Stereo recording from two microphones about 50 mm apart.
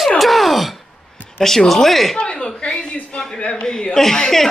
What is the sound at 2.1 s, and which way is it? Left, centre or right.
A man's voice, centre.